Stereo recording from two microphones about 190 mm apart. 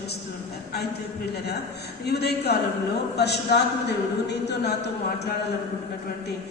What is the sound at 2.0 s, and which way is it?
A woman's voice, 60° left (ahead or behind).